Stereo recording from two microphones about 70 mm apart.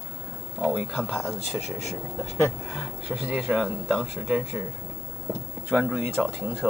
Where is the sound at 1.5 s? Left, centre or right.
Centre.